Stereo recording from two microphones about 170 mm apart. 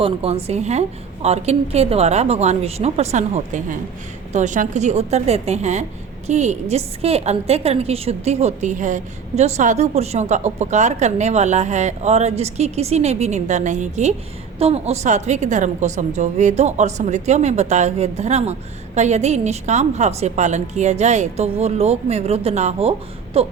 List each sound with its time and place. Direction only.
0.0 s a woman's voice: 35° right (ahead or behind)